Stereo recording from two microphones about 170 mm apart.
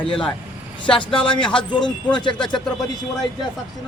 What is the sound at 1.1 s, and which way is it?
A man's voice, 30° left (ahead or behind).